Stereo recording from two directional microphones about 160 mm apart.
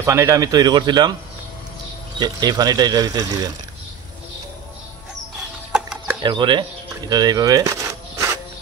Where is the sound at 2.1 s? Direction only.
25° right (ahead or behind).